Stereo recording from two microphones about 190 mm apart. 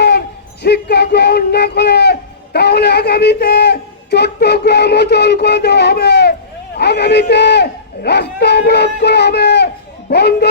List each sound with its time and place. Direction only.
0.6 s speech: 60° left (ahead or behind)